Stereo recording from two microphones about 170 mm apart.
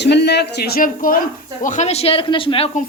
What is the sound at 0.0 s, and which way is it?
A man's voice, 80° left.